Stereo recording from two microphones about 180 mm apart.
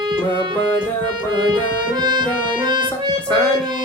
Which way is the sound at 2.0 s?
25° right (ahead or behind).